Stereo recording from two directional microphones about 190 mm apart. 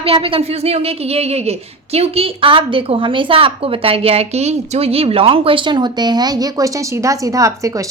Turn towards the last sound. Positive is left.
turn(degrees=-15)  # may be behind; listen again after turning